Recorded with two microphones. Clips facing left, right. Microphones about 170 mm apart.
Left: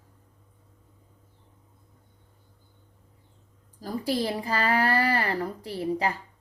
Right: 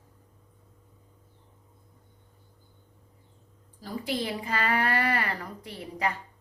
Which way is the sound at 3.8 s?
35° left (ahead or behind).